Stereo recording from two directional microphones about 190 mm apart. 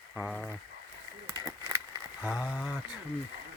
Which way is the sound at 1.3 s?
20° right (ahead or behind).